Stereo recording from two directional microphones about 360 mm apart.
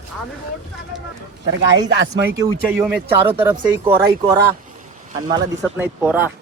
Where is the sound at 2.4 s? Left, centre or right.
Centre.